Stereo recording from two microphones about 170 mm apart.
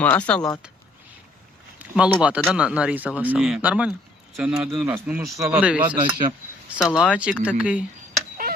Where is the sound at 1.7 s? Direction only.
5° right (ahead or behind).